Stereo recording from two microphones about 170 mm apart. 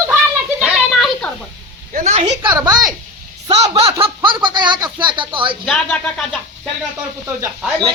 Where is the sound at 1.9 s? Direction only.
45° right (ahead or behind).